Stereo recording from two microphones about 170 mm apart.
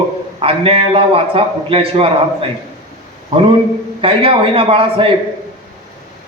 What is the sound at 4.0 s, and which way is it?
A man's voice, 30° right (ahead or behind).